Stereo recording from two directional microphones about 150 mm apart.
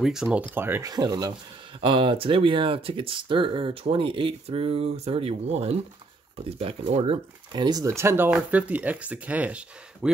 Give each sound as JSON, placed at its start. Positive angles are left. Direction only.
{"t": 0.0, "sound": "speech", "side_deg": -5}
{"t": 0.9, "sound": "speech", "side_deg": -25}
{"t": 7.6, "sound": "speech", "side_deg": -25}